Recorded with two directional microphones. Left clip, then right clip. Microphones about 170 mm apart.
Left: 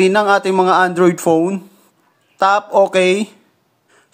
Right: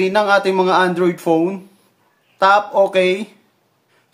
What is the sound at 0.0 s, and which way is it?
Speech, 45° left (ahead or behind).